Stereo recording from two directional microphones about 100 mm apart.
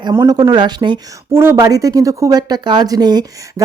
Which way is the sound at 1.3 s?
25° right (ahead or behind).